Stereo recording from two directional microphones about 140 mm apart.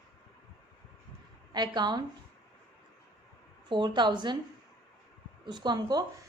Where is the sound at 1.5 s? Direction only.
30° right (ahead or behind).